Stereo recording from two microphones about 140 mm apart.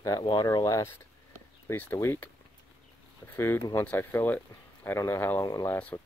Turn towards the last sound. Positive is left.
turn(degrees=20)  # may be behind; listen again after turning